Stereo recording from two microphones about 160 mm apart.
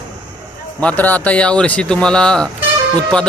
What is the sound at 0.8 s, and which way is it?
Speech, 10° left (ahead or behind).